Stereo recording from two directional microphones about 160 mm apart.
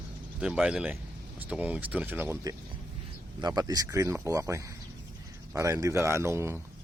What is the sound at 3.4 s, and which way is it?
Speech, 25° right (ahead or behind).